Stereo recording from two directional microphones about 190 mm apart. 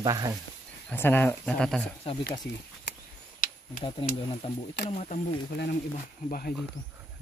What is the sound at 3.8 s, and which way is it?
Speech, 30° left (ahead or behind).